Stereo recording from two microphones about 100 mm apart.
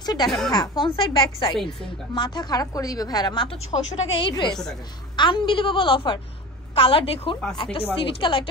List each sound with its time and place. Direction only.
0.0 s a woman's voice: 45° left (ahead or behind)
2.1 s a woman's voice: 45° left (ahead or behind)
3.7 s a woman's voice: 75° left (ahead or behind); by 8.5 s 60° left (ahead or behind)